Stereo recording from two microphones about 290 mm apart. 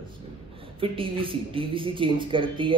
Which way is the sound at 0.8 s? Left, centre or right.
Centre.